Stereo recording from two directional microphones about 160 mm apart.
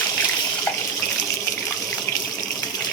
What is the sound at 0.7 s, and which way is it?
Water tap, 10° left (ahead or behind).